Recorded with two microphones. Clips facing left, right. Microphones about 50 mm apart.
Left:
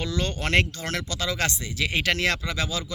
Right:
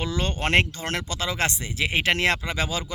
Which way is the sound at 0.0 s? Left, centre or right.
Right.